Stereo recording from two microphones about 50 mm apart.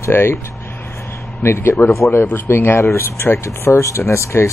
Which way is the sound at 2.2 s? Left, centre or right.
Left.